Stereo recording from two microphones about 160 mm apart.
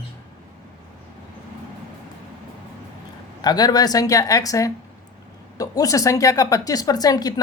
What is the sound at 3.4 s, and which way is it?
Speech, 25° left (ahead or behind).